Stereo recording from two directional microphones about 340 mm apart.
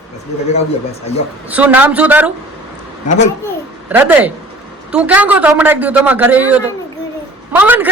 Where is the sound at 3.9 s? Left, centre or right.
Centre.